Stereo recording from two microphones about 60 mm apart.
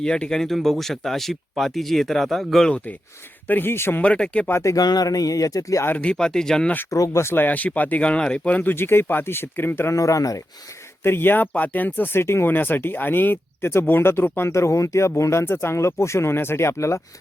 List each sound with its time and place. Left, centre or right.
0.0 s speech: centre
3.4 s speech: left
4.0 s speech: left
4.4 s speech: left
4.7 s speech: left
6.0 s speech: centre
6.9 s speech: left
7.4 s speech: left
8.7 s speech: left
9.9 s speech: left
11.0 s speech: left